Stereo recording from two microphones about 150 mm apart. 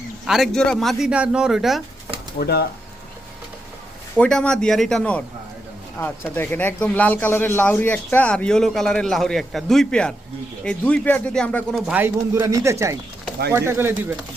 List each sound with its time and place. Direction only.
0.3 s speech: centre (ahead or behind)
2.4 s speech: 90° left
4.2 s speech: 5° left (ahead or behind)
11.9 s speech: 15° right (ahead or behind)